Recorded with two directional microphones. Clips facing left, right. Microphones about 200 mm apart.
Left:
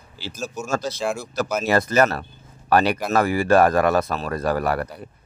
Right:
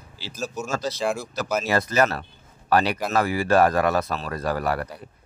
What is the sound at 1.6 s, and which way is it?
Speech, 50° left (ahead or behind).